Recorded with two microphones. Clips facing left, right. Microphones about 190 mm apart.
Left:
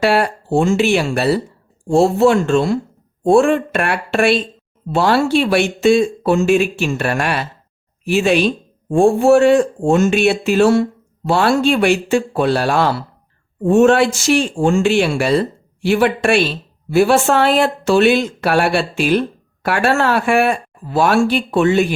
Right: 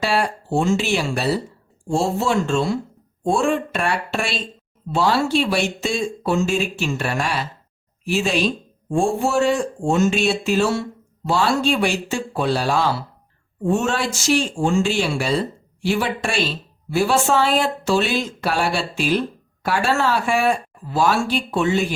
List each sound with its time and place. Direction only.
0.0 s speech: 60° left (ahead or behind)